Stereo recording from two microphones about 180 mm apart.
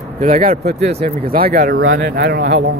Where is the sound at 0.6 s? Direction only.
65° right (ahead or behind).